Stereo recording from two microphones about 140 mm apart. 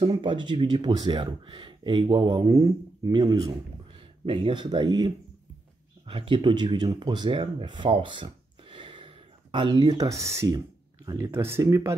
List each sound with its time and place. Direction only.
0.0 s speech: 35° right (ahead or behind)
4.3 s speech: 40° right (ahead or behind); by 11.9 s 20° right (ahead or behind)